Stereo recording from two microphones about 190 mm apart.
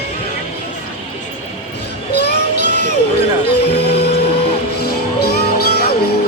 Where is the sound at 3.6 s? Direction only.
60° left (ahead or behind).